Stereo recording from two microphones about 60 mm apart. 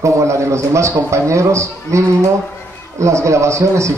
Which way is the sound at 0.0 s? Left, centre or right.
Right.